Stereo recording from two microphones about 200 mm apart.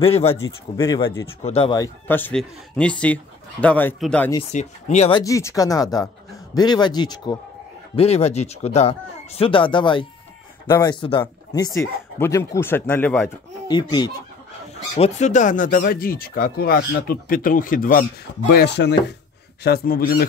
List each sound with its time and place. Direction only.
0.0 s speech: 30° left (ahead or behind)
0.4 s speech: 15° left (ahead or behind)
2.0 s speech: 10° left (ahead or behind)
4.5 s speech: 35° left (ahead or behind)
5.2 s speech: 15° left (ahead or behind)
7.9 s speech: 30° left (ahead or behind); by 13.3 s 10° left (ahead or behind)
13.7 s speech: 20° left (ahead or behind)
15.0 s speech: 35° left (ahead or behind)
18.5 s speech: 55° left (ahead or behind)